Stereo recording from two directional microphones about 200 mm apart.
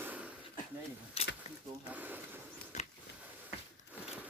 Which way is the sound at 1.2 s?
30° left (ahead or behind).